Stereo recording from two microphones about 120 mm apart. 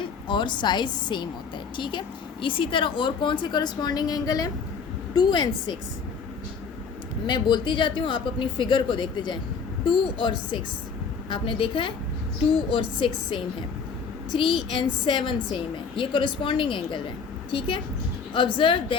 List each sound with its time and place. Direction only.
0.0 s a woman's voice: 40° left (ahead or behind)
7.3 s speech: 40° left (ahead or behind)
13.0 s speech: 45° left (ahead or behind)
14.8 s speech: 45° left (ahead or behind)